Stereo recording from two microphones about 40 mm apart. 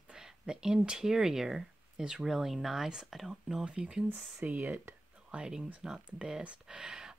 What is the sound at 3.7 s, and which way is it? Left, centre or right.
Speech, right.